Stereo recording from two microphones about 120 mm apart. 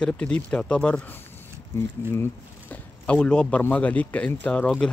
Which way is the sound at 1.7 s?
20° left (ahead or behind).